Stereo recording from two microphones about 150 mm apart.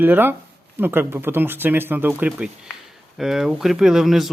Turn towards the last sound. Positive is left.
turn(degrees=0)  # may be behind; listen again after turning